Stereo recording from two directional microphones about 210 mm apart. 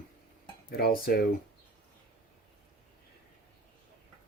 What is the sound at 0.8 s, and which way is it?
Speech, 45° left (ahead or behind).